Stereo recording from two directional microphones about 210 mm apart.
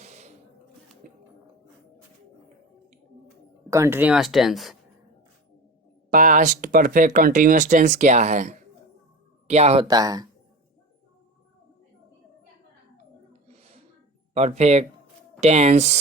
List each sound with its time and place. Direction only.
0.0 s a sound: 35° right (ahead or behind)
1.0 s music: 40° right (ahead or behind)
3.7 s speech: 15° right (ahead or behind)
6.1 s speech: 40° right (ahead or behind)
9.8 s speech: 20° right (ahead or behind)
13.5 s a sound: 30° right (ahead or behind)
14.3 s speech: 30° right (ahead or behind)